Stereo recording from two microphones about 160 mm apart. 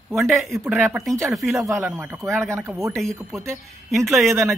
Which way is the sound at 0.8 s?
15° right (ahead or behind).